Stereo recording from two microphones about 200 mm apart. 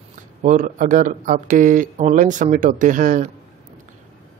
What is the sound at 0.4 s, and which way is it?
Speech, 40° right (ahead or behind).